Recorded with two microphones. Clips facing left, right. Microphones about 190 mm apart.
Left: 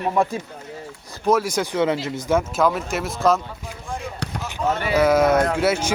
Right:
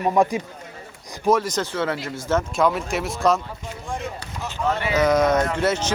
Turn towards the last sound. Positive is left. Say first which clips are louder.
# left 2 dB
turn(degrees=10)  # may be behind; listen again after turning